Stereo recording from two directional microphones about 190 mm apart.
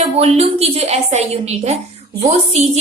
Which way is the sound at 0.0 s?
35° right (ahead or behind).